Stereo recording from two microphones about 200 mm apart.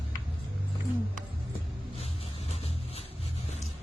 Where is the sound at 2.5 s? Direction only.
30° left (ahead or behind).